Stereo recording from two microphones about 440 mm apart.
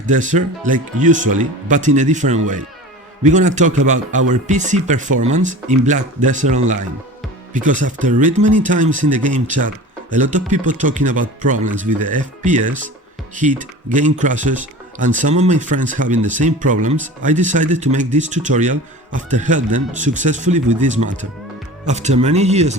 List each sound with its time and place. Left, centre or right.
0.0 s speech: centre